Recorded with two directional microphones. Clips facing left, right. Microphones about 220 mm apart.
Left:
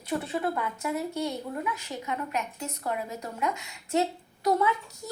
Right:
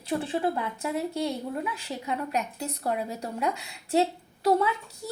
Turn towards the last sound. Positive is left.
turn(degrees=-30)  # may be behind; listen again after turning